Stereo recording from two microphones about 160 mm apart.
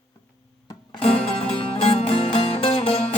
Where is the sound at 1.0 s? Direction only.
35° left (ahead or behind).